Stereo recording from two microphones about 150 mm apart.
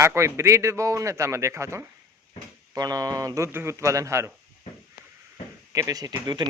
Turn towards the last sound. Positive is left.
turn(degrees=-25)  # may be behind; listen again after turning